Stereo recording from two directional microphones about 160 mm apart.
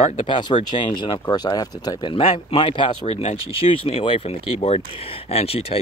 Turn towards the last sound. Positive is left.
turn(degrees=40)  # may be behind; listen again after turning